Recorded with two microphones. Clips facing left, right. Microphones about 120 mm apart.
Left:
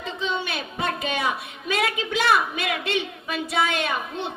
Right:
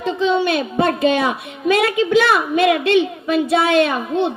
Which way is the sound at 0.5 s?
50° right (ahead or behind).